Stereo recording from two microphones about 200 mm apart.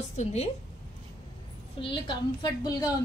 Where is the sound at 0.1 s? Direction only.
35° left (ahead or behind).